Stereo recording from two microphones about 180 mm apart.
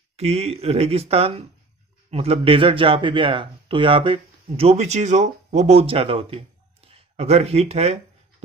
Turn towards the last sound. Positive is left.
turn(degrees=-35)  # may be behind; listen again after turning